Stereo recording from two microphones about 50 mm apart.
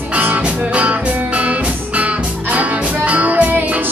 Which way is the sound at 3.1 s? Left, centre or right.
Right.